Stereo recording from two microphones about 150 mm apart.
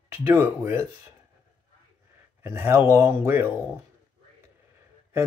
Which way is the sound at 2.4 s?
15° right (ahead or behind).